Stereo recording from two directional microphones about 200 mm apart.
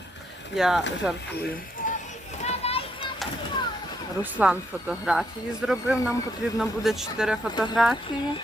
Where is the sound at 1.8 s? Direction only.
40° left (ahead or behind).